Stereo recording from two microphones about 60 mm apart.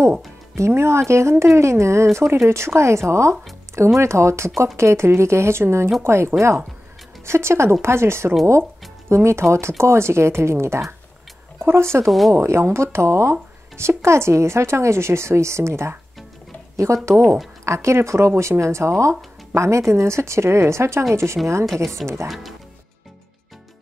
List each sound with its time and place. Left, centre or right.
0.6 s speech: right
22.0 s speech: centre